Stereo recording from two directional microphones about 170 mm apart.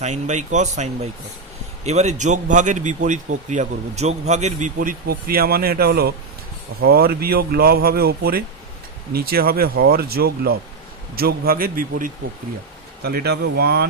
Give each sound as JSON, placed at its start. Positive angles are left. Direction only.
{"t": 0.0, "sound": "a man's voice", "side_deg": -45}
{"t": 13.0, "sound": "speech", "side_deg": -70}